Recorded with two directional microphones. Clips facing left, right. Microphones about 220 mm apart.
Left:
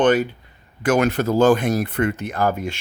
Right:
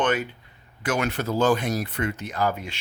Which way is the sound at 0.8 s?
45° left (ahead or behind).